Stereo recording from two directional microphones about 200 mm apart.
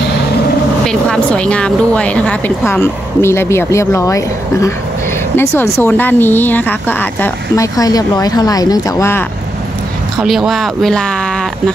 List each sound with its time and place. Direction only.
0.8 s speech: 5° left (ahead or behind)
10.1 s speech: centre (ahead or behind)